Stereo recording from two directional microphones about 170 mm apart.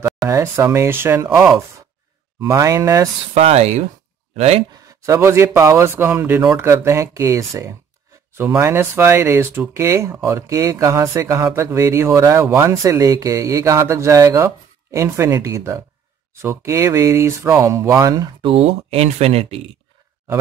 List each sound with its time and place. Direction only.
0.3 s speech: 15° right (ahead or behind)
3.3 s speech: 40° right (ahead or behind)
5.0 s speech: 15° right (ahead or behind)
18.5 s speech: 35° right (ahead or behind)